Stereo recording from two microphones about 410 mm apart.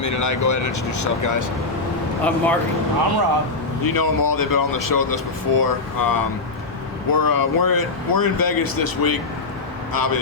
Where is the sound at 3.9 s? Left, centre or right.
Left.